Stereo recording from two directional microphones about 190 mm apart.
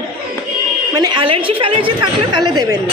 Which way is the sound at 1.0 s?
30° right (ahead or behind).